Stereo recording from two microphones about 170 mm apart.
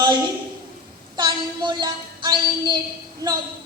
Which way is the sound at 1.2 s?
25° right (ahead or behind).